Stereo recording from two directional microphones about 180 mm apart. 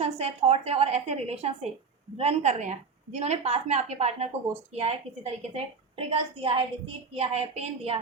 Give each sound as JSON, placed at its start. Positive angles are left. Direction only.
{"t": 0.0, "sound": "a woman's voice", "side_deg": -35}